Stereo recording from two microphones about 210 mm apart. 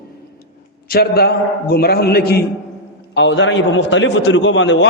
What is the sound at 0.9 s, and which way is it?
A man's voice, 50° left (ahead or behind).